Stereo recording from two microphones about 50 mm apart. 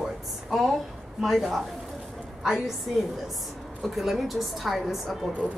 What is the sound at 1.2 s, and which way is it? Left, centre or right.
Speech, centre.